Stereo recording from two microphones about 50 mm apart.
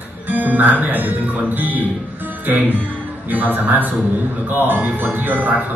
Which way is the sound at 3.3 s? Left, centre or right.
Right.